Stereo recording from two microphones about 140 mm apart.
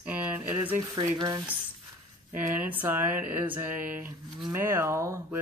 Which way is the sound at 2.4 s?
10° right (ahead or behind).